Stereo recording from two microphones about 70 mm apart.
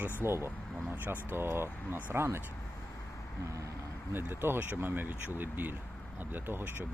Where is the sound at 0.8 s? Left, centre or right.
Right.